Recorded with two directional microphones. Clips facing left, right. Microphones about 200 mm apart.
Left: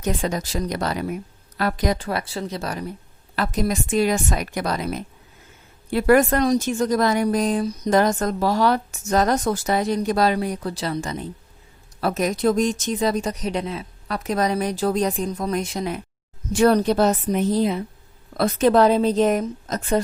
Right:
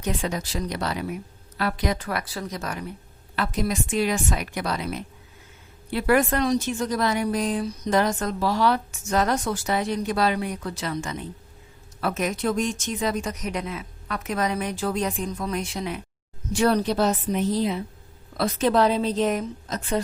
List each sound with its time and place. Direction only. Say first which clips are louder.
0.0 s a woman's voice: left 3 dB; 40° left (ahead or behind)